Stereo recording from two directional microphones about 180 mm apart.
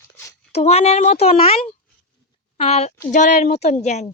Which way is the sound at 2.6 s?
35° left (ahead or behind).